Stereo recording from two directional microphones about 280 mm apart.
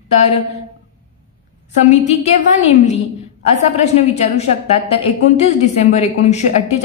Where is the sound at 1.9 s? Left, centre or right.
Left.